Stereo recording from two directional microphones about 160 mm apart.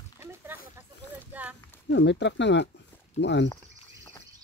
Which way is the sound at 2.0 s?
90° left.